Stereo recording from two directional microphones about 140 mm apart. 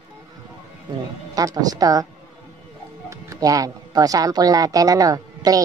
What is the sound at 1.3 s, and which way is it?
Speech, 25° right (ahead or behind).